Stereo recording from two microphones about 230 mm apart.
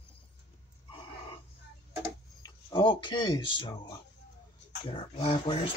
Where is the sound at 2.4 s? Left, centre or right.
Left.